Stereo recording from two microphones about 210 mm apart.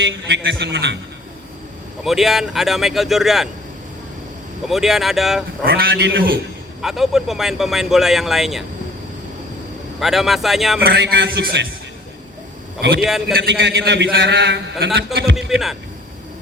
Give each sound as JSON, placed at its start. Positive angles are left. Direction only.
{"t": 0.0, "sound": "a man's voice", "side_deg": -55}
{"t": 2.0, "sound": "speech", "side_deg": 0}
{"t": 4.7, "sound": "speech", "side_deg": 0}
{"t": 5.6, "sound": "a man's voice", "side_deg": -45}
{"t": 6.8, "sound": "speech", "side_deg": 0}
{"t": 10.0, "sound": "speech", "side_deg": 0}
{"t": 10.8, "sound": "a man's voice", "side_deg": -55}
{"t": 13.0, "sound": "speech", "side_deg": 0}
{"t": 13.3, "sound": "a man's voice", "side_deg": -50}
{"t": 15.4, "sound": "speech", "side_deg": 0}